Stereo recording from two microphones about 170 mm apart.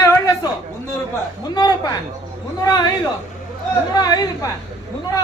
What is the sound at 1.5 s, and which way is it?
A man's voice, 25° left (ahead or behind).